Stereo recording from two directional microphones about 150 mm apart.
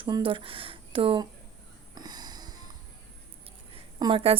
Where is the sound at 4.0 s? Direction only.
35° right (ahead or behind).